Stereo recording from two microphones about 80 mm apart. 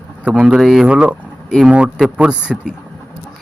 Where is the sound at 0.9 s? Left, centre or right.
Centre.